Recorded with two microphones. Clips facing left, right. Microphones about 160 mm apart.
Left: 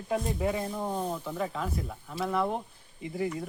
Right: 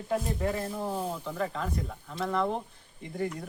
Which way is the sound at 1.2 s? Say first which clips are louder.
Even; 5° left (ahead or behind).